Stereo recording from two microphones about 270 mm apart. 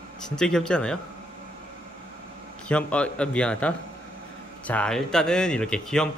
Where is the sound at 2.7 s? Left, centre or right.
Centre.